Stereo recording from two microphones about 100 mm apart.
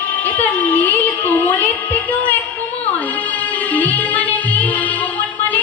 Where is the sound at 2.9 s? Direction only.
15° left (ahead or behind).